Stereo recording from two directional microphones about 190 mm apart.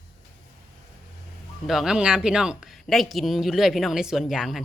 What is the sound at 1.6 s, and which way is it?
Speech, centre (ahead or behind).